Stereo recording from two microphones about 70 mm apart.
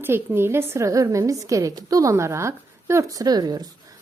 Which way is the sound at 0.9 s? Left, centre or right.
Right.